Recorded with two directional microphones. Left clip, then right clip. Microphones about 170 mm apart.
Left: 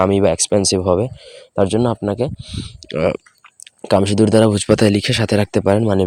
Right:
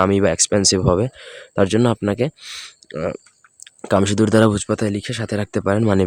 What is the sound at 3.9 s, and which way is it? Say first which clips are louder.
Speech: left 3 dB; 5° right (ahead or behind).